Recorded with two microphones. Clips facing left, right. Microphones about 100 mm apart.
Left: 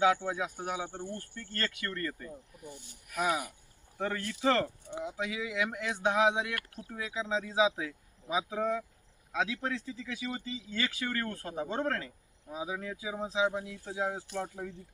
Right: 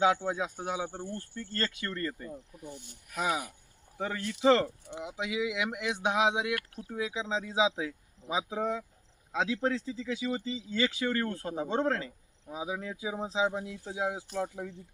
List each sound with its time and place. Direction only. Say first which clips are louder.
0.0 s speech: right 1 dB; 20° right (ahead or behind)
1.4 s speech: right 3 dB; 25° right (ahead or behind); by 14.7 s 10° right (ahead or behind)